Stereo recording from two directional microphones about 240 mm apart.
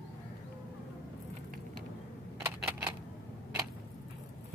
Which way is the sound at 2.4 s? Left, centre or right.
Centre.